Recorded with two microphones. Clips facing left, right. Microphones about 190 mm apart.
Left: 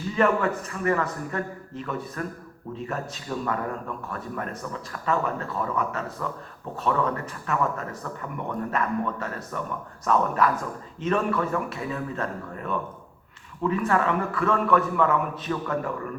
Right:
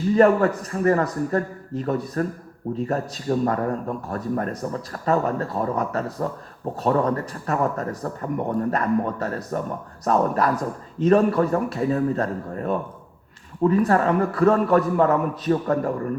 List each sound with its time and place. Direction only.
0.2 s speech: 40° right (ahead or behind)